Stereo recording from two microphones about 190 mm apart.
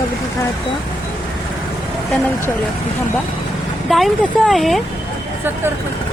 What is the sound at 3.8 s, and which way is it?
Speech, centre (ahead or behind).